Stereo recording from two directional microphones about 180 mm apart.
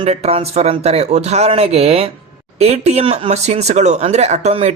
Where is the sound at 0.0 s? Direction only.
35° right (ahead or behind).